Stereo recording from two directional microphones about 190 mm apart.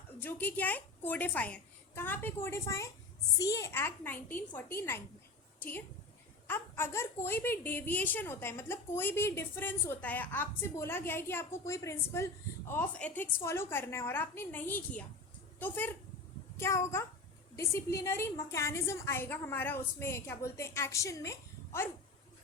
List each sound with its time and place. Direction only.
0.2 s a woman's voice: 10° left (ahead or behind)